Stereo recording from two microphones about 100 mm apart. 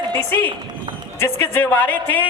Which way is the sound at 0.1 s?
20° left (ahead or behind).